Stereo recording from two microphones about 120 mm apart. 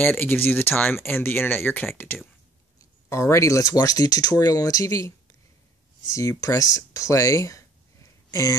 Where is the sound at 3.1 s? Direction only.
25° left (ahead or behind).